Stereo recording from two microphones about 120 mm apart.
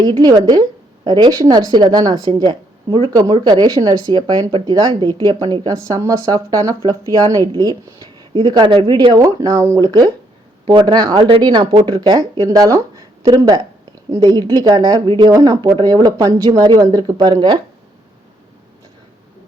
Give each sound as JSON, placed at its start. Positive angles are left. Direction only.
{"t": 0.0, "sound": "speech", "side_deg": -35}
{"t": 15.3, "sound": "speech", "side_deg": -30}